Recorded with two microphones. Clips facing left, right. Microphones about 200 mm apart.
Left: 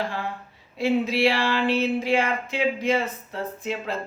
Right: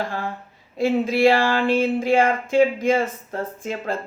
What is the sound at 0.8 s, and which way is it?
Speech, 50° right (ahead or behind).